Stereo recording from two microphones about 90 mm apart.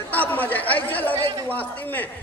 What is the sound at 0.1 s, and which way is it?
Speech, 20° left (ahead or behind).